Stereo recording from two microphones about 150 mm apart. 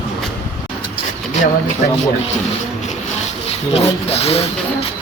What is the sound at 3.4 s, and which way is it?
Speech, 40° left (ahead or behind).